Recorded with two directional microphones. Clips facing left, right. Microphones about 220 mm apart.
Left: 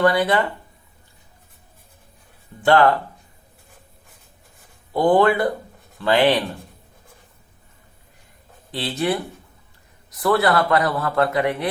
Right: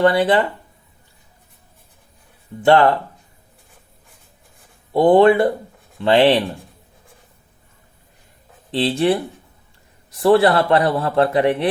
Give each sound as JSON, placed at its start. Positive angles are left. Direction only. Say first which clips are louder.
{"t": 0.0, "sound": "a man's voice", "louder": "right 3 dB", "side_deg": -25}
{"t": 2.6, "sound": "a man's voice", "louder": "right 2 dB", "side_deg": -25}
{"t": 4.9, "sound": "a man's voice", "louder": "right 5 dB", "side_deg": -25}
{"t": 8.7, "sound": "a man's voice", "louder": "right 6 dB", "side_deg": -30}